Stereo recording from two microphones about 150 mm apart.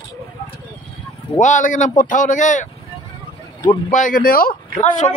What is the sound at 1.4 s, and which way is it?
Speech, 55° left (ahead or behind).